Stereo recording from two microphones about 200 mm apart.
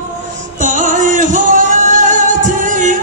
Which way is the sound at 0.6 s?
40° right (ahead or behind).